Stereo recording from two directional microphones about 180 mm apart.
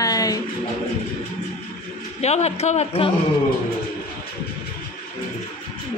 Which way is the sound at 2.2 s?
35° left (ahead or behind).